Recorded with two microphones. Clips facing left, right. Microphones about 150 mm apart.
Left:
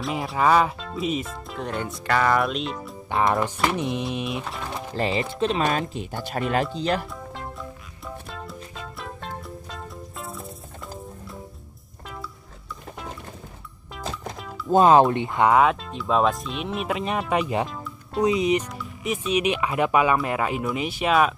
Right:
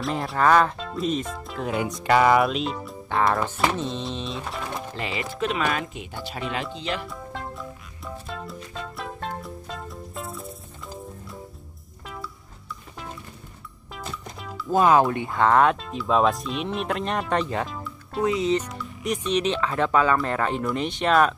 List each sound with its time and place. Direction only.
0.0 s speech: centre (ahead or behind)
3.1 s speech: 20° left (ahead or behind)
4.9 s speech: 35° left (ahead or behind)
6.2 s speech: 50° left (ahead or behind)
7.3 s music: centre (ahead or behind)
8.9 s music: centre (ahead or behind)
14.7 s speech: 25° left (ahead or behind)
15.5 s speech: centre (ahead or behind)
18.7 s speech: centre (ahead or behind)